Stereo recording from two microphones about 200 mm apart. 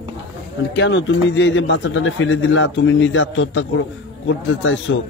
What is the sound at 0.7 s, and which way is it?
Speech, 65° left (ahead or behind).